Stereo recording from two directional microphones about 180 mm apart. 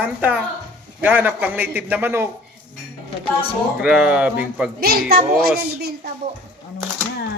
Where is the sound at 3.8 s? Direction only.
5° right (ahead or behind).